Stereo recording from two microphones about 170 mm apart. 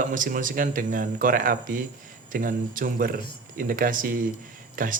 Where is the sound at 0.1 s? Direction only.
50° right (ahead or behind).